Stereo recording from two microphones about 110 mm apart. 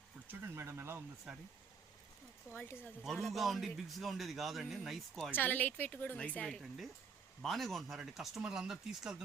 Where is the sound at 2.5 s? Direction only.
20° left (ahead or behind).